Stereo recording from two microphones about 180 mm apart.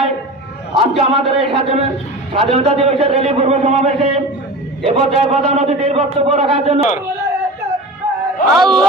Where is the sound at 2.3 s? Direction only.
30° right (ahead or behind).